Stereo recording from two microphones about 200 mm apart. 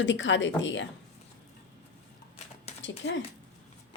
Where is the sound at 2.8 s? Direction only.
65° left (ahead or behind).